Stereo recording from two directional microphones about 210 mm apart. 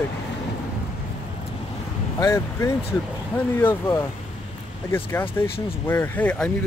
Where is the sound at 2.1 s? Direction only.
15° left (ahead or behind).